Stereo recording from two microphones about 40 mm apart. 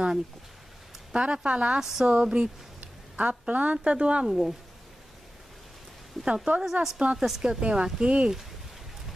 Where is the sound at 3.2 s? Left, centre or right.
Right.